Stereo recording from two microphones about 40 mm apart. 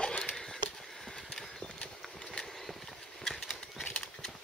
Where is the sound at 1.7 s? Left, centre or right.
Left.